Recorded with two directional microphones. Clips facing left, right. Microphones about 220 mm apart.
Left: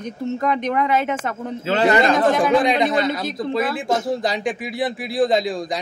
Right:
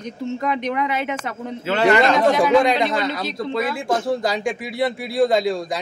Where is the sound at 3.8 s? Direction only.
20° left (ahead or behind).